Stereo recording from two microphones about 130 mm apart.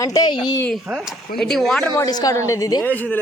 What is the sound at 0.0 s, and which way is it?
Speech, 30° left (ahead or behind).